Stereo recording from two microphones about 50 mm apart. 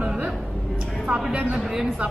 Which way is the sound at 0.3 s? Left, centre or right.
Centre.